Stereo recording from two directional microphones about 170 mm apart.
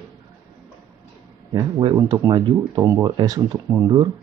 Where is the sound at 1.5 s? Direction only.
25° right (ahead or behind).